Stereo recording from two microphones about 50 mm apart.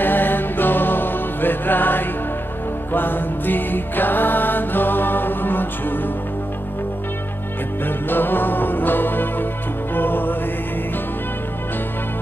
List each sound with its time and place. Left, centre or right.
0.0 s music: left
7.8 s music: left